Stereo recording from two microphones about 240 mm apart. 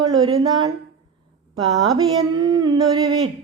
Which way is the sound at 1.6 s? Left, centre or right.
Centre.